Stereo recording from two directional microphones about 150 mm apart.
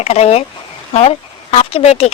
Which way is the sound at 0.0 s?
45° left (ahead or behind).